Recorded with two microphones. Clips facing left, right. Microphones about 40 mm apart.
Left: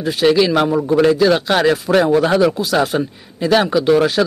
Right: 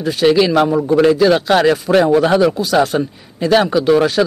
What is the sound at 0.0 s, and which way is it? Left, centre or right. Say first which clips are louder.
Speech: right 1 dB; centre.